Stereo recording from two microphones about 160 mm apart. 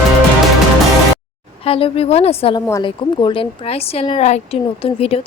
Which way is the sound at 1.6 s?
35° left (ahead or behind).